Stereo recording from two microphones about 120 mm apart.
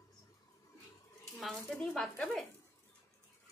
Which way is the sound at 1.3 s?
5° left (ahead or behind).